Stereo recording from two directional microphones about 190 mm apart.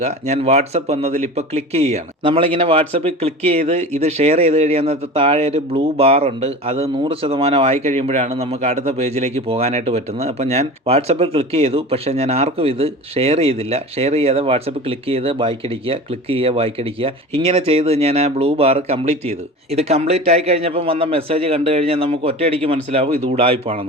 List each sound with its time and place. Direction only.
0.0 s speech: 35° right (ahead or behind)